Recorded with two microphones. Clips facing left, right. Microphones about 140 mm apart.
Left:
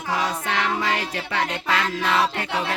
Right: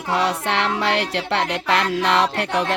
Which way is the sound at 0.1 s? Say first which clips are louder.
Right 4 dB; 70° right (ahead or behind).